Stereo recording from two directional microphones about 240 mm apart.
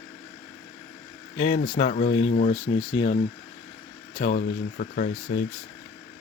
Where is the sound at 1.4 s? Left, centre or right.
Left.